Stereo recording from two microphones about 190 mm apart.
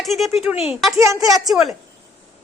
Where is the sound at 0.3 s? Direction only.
5° right (ahead or behind).